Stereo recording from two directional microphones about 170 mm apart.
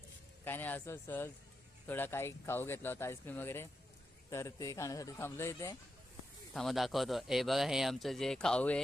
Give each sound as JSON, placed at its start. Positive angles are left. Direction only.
{"t": 0.4, "sound": "speech", "side_deg": 10}
{"t": 6.5, "sound": "speech", "side_deg": 0}